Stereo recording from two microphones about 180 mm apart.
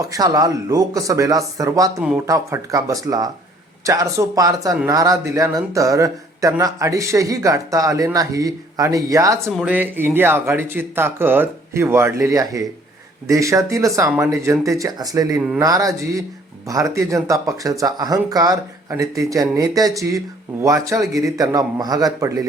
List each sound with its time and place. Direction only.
0.0 s speech: 20° right (ahead or behind)
2.0 s speech: 5° right (ahead or behind)
2.2 s speech: 20° right (ahead or behind)